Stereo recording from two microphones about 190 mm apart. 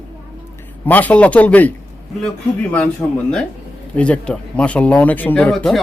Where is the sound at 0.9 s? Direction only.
10° left (ahead or behind).